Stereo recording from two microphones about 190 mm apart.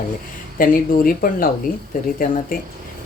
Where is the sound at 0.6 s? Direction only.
50° left (ahead or behind).